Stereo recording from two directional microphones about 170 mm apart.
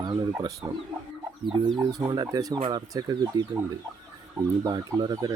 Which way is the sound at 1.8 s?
20° right (ahead or behind).